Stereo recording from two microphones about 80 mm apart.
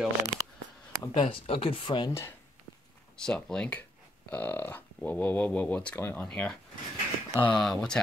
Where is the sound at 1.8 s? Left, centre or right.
Left.